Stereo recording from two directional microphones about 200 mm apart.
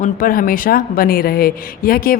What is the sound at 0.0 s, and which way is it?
A woman's voice, 45° left (ahead or behind).